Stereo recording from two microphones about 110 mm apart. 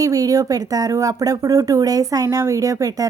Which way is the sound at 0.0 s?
30° right (ahead or behind).